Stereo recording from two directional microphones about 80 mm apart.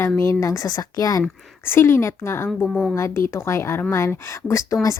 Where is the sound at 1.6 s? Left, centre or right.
Left.